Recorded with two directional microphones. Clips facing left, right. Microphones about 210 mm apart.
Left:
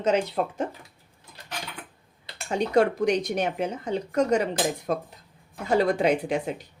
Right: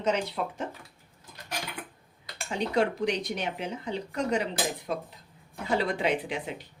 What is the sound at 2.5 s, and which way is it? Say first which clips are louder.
Speech: left 5 dB; 45° left (ahead or behind).